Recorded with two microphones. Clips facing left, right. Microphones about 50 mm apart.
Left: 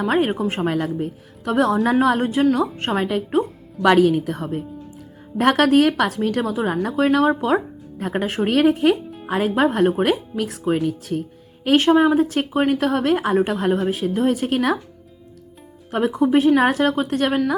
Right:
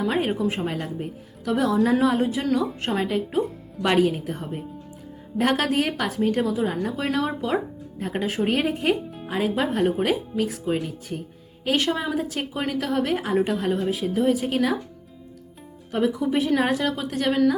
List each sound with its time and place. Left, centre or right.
0.0 s a woman's voice: left
1.5 s a woman's voice: left
3.8 s a woman's voice: left
5.4 s a woman's voice: left
9.2 s a woman's voice: left
11.6 s a woman's voice: left
15.9 s a woman's voice: left